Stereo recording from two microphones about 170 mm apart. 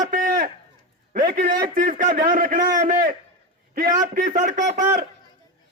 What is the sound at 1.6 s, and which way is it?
Speech, 50° right (ahead or behind).